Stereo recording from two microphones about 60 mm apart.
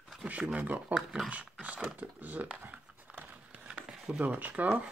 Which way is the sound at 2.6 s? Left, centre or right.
Right.